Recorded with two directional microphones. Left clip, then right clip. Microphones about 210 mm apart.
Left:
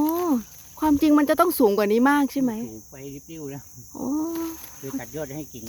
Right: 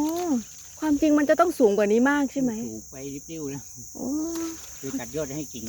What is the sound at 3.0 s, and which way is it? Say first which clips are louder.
Speech: right 2 dB; centre (ahead or behind).